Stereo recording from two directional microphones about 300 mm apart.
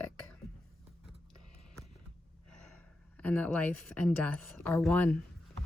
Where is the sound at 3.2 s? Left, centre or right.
Centre.